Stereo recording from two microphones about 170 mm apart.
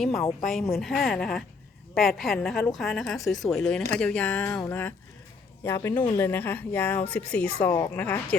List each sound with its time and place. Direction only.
0.1 s a woman's voice: 20° left (ahead or behind)
0.8 s a woman's voice: centre (ahead or behind)